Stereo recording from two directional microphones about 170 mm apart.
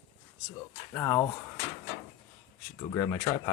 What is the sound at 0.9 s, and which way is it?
Speech, 20° left (ahead or behind).